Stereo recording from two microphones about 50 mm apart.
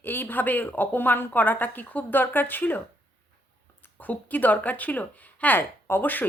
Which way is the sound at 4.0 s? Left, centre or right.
Left.